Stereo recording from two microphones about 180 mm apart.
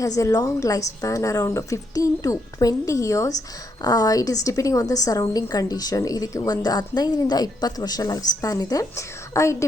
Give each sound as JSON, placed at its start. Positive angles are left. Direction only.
{"t": 0.2, "sound": "a woman's voice", "side_deg": 20}